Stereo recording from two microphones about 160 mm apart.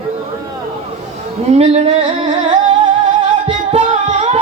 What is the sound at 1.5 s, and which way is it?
Singing, 45° right (ahead or behind).